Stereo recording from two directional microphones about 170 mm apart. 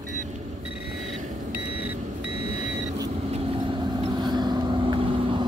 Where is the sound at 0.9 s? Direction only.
Centre (ahead or behind).